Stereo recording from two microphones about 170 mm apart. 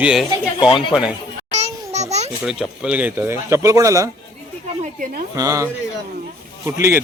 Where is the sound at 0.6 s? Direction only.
30° left (ahead or behind).